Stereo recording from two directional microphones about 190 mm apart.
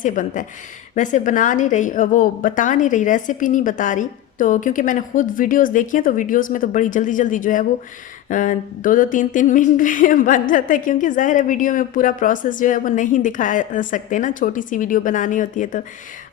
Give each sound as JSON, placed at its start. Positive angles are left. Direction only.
{"t": 0.0, "sound": "speech", "side_deg": 45}